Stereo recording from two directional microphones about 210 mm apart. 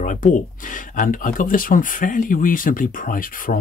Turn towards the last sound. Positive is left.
turn(degrees=40)  # may be behind; listen again after turning